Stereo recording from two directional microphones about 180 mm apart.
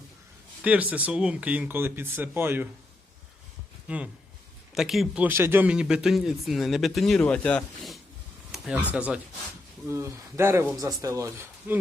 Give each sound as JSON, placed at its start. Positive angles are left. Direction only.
{"t": 0.6, "sound": "speech", "side_deg": -10}
{"t": 3.8, "sound": "speech", "side_deg": -5}